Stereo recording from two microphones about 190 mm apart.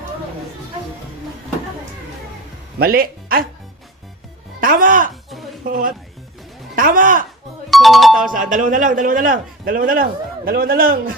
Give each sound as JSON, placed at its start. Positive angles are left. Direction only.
{"t": 2.7, "sound": "speech", "side_deg": -50}
{"t": 4.6, "sound": "a man's voice", "side_deg": -45}
{"t": 7.7, "sound": "speech", "side_deg": 0}
{"t": 8.3, "sound": "a man's voice", "side_deg": -45}